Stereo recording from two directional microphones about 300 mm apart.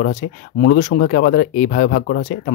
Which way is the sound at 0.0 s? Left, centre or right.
Left.